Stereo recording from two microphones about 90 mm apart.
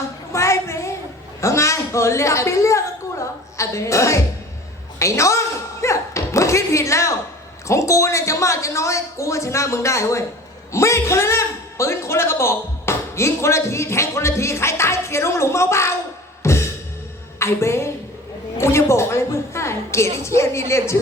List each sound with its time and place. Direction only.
0.3 s music: 35° left (ahead or behind)
1.4 s a woman's voice: 35° left (ahead or behind)
4.9 s a sound: 35° left (ahead or behind)
7.7 s a man's voice: 35° left (ahead or behind)
16.4 s music: 30° left (ahead or behind)
17.4 s speech: 30° left (ahead or behind)